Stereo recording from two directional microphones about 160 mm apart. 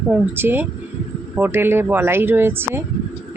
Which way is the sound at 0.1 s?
15° right (ahead or behind).